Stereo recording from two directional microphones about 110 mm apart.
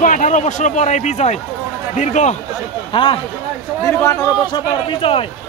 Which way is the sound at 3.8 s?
25° left (ahead or behind).